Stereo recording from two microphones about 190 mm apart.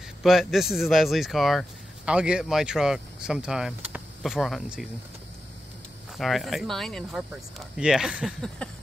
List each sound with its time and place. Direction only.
0.2 s speech: centre (ahead or behind)
6.1 s speech: centre (ahead or behind)